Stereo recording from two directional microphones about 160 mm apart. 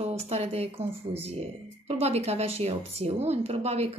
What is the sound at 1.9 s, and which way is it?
A woman's voice, 40° right (ahead or behind).